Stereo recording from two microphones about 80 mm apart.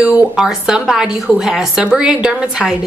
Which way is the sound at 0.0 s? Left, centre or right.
Centre.